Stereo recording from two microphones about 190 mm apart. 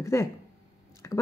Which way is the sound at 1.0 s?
15° left (ahead or behind).